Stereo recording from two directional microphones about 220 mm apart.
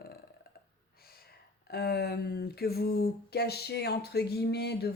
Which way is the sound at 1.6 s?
45° left (ahead or behind).